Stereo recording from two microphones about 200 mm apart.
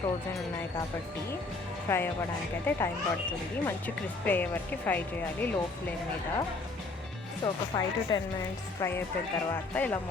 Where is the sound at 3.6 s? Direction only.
10° left (ahead or behind).